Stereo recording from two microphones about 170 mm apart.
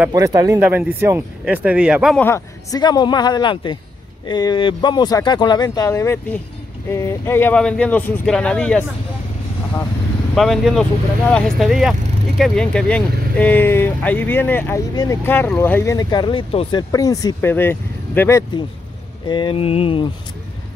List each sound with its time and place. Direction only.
0.1 s speech: 20° right (ahead or behind); by 2.1 s 5° right (ahead or behind)
2.1 s speech: 15° left (ahead or behind)
10.3 s speech: centre (ahead or behind)
19.2 s speech: 30° left (ahead or behind)